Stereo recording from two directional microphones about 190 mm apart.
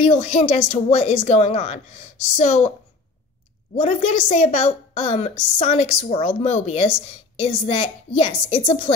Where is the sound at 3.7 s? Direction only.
35° left (ahead or behind).